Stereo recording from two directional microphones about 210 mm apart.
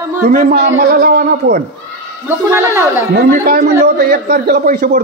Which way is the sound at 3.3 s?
45° right (ahead or behind).